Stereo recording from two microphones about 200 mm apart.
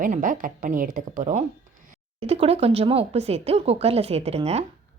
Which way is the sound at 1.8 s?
30° right (ahead or behind).